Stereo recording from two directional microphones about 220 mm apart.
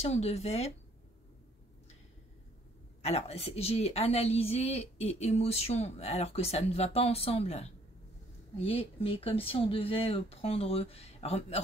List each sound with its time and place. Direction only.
0.0 s a woman's voice: 30° left (ahead or behind)
3.0 s a woman's voice: 30° left (ahead or behind)